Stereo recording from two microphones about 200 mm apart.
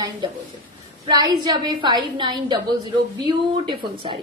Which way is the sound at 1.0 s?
20° right (ahead or behind).